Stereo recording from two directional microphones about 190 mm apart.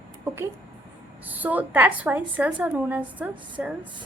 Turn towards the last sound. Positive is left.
turn(degrees=-5)  # may be behind; listen again after turning